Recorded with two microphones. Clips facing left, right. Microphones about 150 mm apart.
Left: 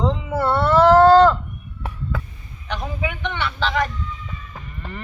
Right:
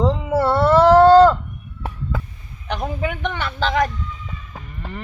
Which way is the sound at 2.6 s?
45° right (ahead or behind).